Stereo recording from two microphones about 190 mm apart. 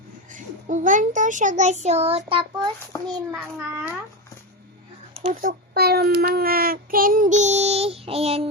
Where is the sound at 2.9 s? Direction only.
15° left (ahead or behind).